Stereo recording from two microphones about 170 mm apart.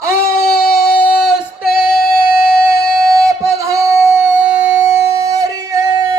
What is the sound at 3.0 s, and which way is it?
Singing, 20° right (ahead or behind).